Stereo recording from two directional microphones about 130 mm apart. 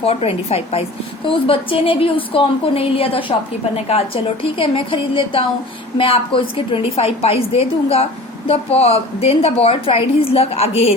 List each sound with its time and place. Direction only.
0.0 s a woman's voice: 50° left (ahead or behind)